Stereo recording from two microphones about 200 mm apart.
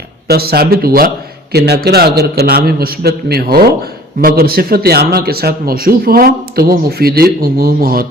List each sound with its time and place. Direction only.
0.3 s a man's voice: 50° right (ahead or behind)